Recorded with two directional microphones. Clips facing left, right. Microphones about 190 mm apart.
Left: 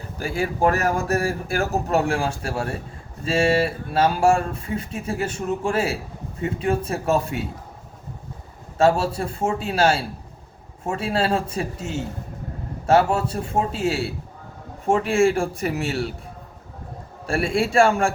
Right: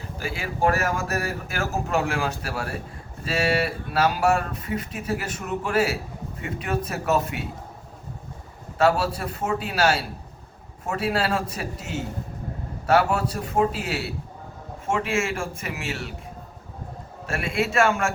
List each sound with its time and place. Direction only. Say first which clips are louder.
0.2 s a man's voice: left 4 dB; 35° left (ahead or behind)
8.8 s speech: left 2 dB; 25° left (ahead or behind)
12.8 s a man's voice: left 3 dB; 25° left (ahead or behind)
17.2 s a man's voice: left 4 dB; 35° left (ahead or behind)